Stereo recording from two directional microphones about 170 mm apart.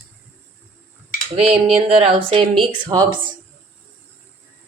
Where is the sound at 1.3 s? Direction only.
35° right (ahead or behind).